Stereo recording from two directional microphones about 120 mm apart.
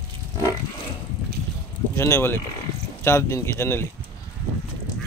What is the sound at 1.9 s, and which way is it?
Speech, 20° left (ahead or behind).